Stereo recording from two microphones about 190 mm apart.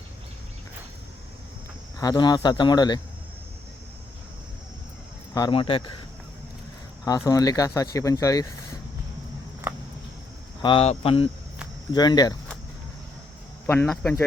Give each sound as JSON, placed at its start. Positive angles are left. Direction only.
{"t": 2.0, "sound": "speech", "side_deg": 20}
{"t": 5.3, "sound": "speech", "side_deg": 25}
{"t": 7.0, "sound": "speech", "side_deg": 20}
{"t": 10.6, "sound": "speech", "side_deg": 30}
{"t": 13.7, "sound": "speech", "side_deg": 5}